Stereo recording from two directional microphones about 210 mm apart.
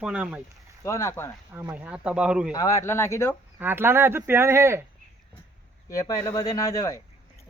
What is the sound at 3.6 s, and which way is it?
Speech, 10° right (ahead or behind).